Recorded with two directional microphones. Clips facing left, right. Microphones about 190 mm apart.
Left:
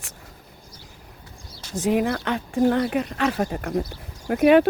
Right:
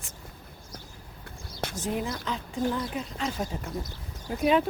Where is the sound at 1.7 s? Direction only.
70° left (ahead or behind).